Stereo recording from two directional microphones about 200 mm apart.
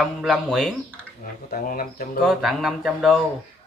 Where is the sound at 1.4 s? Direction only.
45° left (ahead or behind).